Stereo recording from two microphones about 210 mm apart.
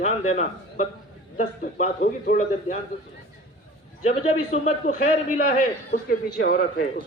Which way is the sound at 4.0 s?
30° left (ahead or behind).